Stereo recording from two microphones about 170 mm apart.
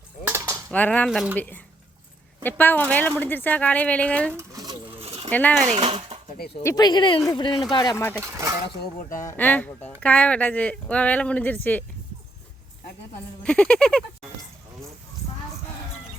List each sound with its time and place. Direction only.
0.3 s cutlery: 15° right (ahead or behind)
0.7 s speech: 10° left (ahead or behind)
1.4 s speech: 10° left (ahead or behind)
4.4 s a sound: 20° right (ahead or behind)
5.3 s speech: 10° left (ahead or behind)
6.6 s speech: 20° left (ahead or behind)
8.2 s speech: 15° right (ahead or behind)
9.2 s speech: 10° left (ahead or behind)
13.4 s speech: 5° left (ahead or behind)